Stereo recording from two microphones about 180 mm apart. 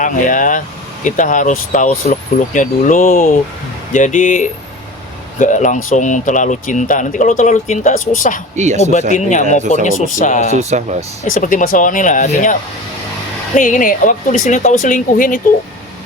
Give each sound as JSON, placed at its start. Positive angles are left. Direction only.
{"t": 0.0, "sound": "speech", "side_deg": 45}
{"t": 8.5, "sound": "speech", "side_deg": -40}
{"t": 8.8, "sound": "speech", "side_deg": 40}
{"t": 10.6, "sound": "speech", "side_deg": -40}
{"t": 11.3, "sound": "speech", "side_deg": 50}
{"t": 13.6, "sound": "speech", "side_deg": 50}